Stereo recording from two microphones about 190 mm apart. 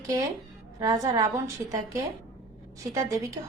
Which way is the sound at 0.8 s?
15° right (ahead or behind).